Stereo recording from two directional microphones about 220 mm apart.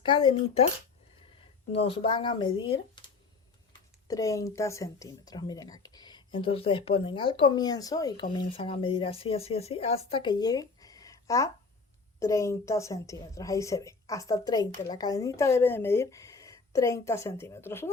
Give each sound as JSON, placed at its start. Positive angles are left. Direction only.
{"t": 0.0, "sound": "speech", "side_deg": 25}
{"t": 1.7, "sound": "a woman's voice", "side_deg": 25}